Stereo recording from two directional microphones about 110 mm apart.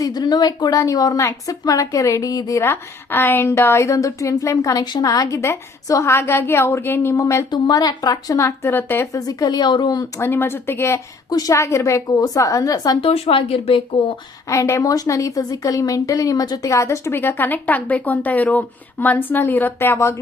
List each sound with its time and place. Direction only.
0.0 s a woman's voice: 35° left (ahead or behind); by 9.0 s 20° left (ahead or behind)
9.1 s speech: 35° left (ahead or behind)
10.2 s a woman's voice: 20° left (ahead or behind)
11.3 s a woman's voice: 35° left (ahead or behind)
13.0 s speech: 60° left (ahead or behind)
14.4 s a woman's voice: 30° left (ahead or behind)